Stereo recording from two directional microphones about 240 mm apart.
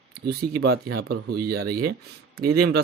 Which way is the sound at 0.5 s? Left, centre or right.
Right.